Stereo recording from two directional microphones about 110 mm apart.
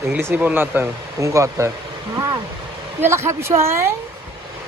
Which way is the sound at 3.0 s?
25° right (ahead or behind).